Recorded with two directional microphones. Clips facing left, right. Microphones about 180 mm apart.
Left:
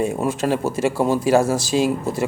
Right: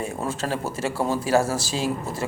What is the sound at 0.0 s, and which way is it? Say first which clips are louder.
Speech: left 7 dB; 15° left (ahead or behind).